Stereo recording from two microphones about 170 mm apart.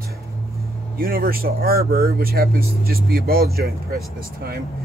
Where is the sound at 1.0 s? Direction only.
60° right (ahead or behind).